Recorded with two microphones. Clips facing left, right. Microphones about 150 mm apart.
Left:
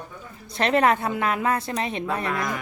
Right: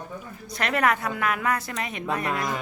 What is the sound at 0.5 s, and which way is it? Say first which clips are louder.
A woman's voice: left 4 dB; 25° left (ahead or behind).